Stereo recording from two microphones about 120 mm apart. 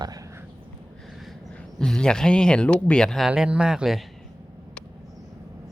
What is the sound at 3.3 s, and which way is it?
Speech, 5° right (ahead or behind).